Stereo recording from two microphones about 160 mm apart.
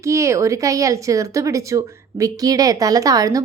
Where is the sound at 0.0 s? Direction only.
20° right (ahead or behind).